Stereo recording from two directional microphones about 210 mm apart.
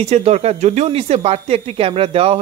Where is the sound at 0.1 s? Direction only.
30° right (ahead or behind).